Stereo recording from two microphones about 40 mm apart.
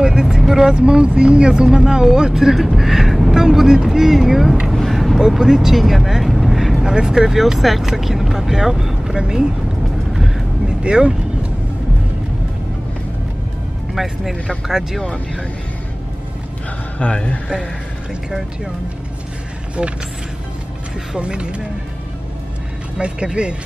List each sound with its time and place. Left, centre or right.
0.0 s vehicle: centre
0.7 s speech: right; by 4.6 s centre
4.9 s vehicle: centre
5.3 s speech: centre
10.1 s vehicle: centre
10.7 s speech: right
13.9 s speech: centre
17.0 s a man's voice: left
19.8 s speech: right
21.2 s speech: right
22.9 s speech: right